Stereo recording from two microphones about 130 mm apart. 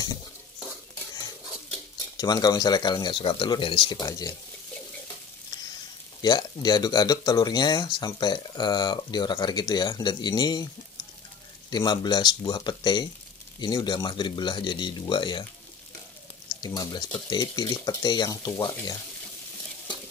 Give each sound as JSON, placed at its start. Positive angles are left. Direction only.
{"t": 2.1, "sound": "speech", "side_deg": 30}
{"t": 6.2, "sound": "speech", "side_deg": 30}
{"t": 11.7, "sound": "speech", "side_deg": 35}
{"t": 16.6, "sound": "speech", "side_deg": 30}